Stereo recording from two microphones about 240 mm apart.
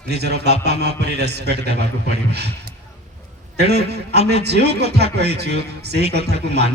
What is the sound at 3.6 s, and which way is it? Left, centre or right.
A man's voice, right.